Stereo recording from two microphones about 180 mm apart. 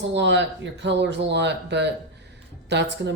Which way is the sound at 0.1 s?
75° right (ahead or behind).